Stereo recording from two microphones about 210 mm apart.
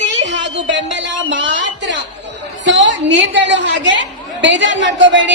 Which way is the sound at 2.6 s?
60° right (ahead or behind).